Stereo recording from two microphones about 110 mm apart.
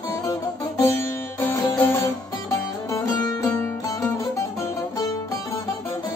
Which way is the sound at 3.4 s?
10° left (ahead or behind).